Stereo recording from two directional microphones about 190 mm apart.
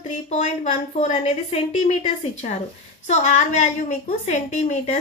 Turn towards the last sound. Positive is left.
turn(degrees=35)  # may be behind; listen again after turning